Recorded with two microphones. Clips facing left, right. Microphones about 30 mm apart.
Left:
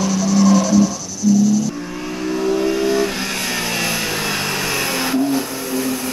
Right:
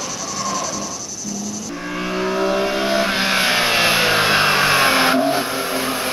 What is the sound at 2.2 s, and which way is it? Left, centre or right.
Vehicle, right.